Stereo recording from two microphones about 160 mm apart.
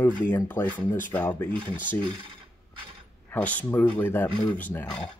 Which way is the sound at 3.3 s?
10° left (ahead or behind).